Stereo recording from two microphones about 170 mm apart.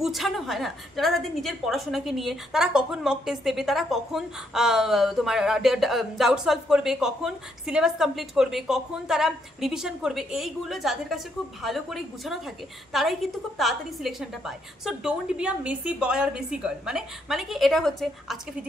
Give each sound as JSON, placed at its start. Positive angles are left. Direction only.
{"t": 0.0, "sound": "a woman's voice", "side_deg": 0}